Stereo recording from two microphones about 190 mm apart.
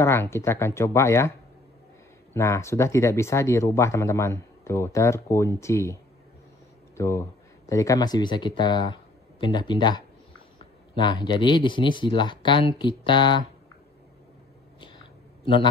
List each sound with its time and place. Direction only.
0.0 s speech: 15° left (ahead or behind)
2.3 s speech: 15° left (ahead or behind)
7.0 s speech: 15° left (ahead or behind)